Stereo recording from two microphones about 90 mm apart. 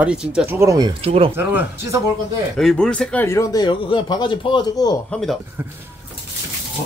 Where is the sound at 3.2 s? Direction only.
30° left (ahead or behind).